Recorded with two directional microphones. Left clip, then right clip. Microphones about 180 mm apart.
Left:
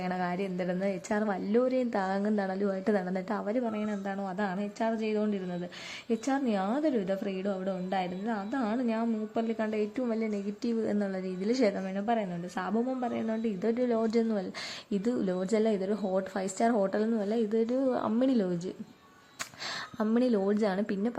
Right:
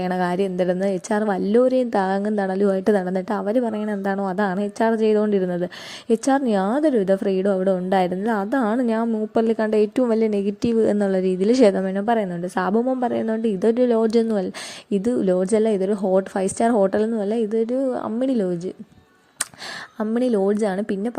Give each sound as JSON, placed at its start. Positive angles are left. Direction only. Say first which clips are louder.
{"t": 0.0, "sound": "a woman's voice", "louder": "right 11 dB", "side_deg": -40}
{"t": 20.1, "sound": "a woman's voice", "louder": "right 8 dB", "side_deg": -30}